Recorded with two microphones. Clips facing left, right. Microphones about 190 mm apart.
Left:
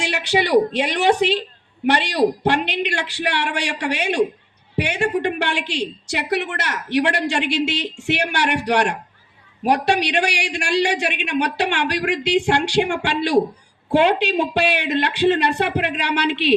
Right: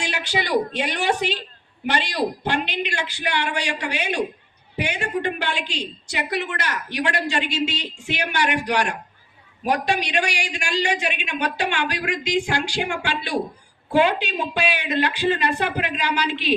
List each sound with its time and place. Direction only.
0.0 s a man's voice: 70° left (ahead or behind)
2.4 s a man's voice: 70° left (ahead or behind)